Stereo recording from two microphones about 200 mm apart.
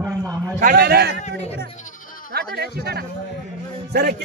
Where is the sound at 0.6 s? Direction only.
45° right (ahead or behind).